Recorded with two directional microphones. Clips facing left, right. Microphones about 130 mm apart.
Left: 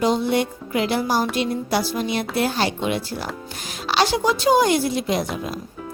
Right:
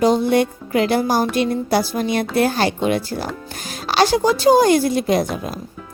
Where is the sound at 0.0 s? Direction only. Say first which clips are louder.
Right 4 dB; 45° right (ahead or behind).